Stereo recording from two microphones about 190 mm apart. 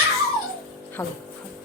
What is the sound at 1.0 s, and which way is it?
Speech, 10° left (ahead or behind).